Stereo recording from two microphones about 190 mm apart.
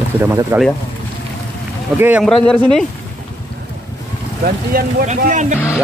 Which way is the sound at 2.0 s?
10° right (ahead or behind).